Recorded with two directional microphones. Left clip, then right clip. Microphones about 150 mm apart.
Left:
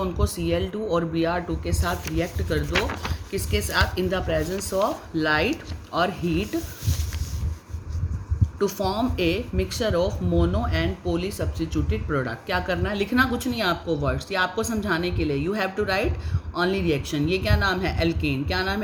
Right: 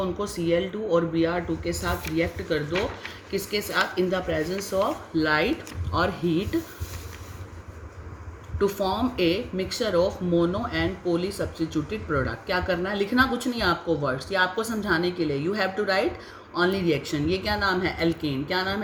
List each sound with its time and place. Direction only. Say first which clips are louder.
0.0 s speech: even; 50° left (ahead or behind)
3.3 s speech: left 1 dB; 50° left (ahead or behind)
8.5 s speech: even; 35° left (ahead or behind)